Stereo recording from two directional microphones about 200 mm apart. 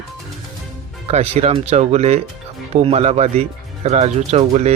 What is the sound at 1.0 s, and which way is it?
Speech, 30° right (ahead or behind).